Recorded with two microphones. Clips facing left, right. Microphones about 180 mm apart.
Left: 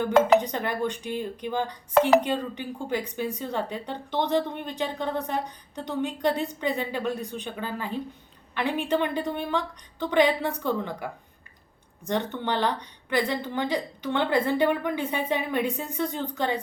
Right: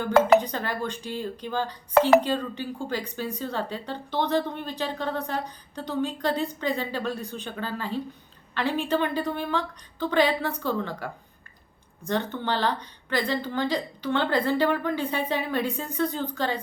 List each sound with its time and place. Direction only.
0.3 s a woman's voice: 20° left (ahead or behind)